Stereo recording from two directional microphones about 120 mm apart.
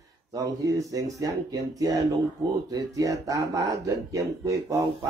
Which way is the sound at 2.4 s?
30° right (ahead or behind).